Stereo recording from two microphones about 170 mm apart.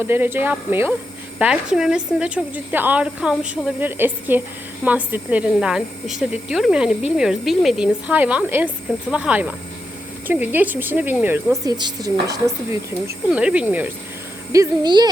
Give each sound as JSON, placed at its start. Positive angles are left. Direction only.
{"t": 0.0, "sound": "a woman's voice", "side_deg": -10}
{"t": 11.6, "sound": "a woman's voice", "side_deg": -25}
{"t": 13.3, "sound": "a woman's voice", "side_deg": -5}
{"t": 14.5, "sound": "speech", "side_deg": -20}